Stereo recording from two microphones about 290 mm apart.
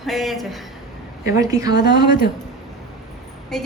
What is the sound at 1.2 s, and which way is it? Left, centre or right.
Speech, centre.